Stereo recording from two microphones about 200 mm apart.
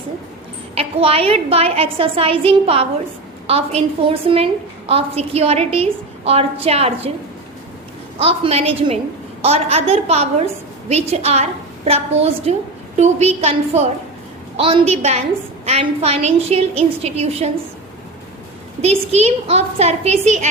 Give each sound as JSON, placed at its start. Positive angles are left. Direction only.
{"t": 0.8, "sound": "a woman's voice", "side_deg": -30}
{"t": 8.2, "sound": "a woman's voice", "side_deg": -30}
{"t": 18.8, "sound": "a woman's voice", "side_deg": -30}